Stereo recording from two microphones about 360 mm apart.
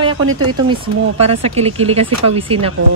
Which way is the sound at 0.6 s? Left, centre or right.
Centre.